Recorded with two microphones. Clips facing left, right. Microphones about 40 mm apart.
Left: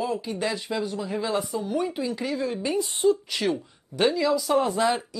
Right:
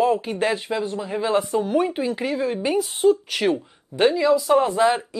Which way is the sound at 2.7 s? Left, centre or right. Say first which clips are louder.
Right 4 dB; right.